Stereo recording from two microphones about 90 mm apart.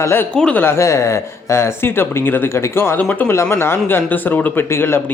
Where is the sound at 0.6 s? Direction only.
30° left (ahead or behind).